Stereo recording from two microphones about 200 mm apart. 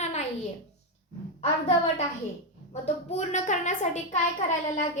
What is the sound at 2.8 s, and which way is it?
A woman's voice, 35° left (ahead or behind).